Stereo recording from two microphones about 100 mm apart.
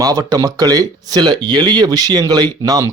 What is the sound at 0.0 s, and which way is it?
Speech, 40° right (ahead or behind).